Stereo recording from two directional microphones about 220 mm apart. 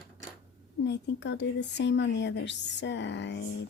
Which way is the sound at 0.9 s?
50° left (ahead or behind).